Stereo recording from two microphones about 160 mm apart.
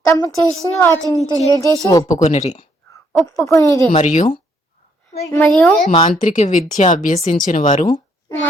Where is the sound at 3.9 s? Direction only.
45° left (ahead or behind).